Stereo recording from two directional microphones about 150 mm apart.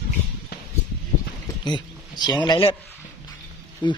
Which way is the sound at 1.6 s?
30° left (ahead or behind).